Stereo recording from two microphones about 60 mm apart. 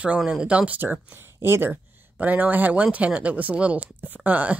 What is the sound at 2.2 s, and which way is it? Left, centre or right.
A woman's voice, right.